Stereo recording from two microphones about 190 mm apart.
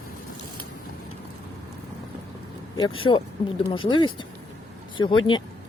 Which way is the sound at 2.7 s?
25° left (ahead or behind).